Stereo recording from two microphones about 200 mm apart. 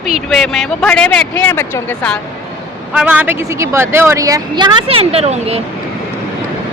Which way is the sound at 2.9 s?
5° right (ahead or behind).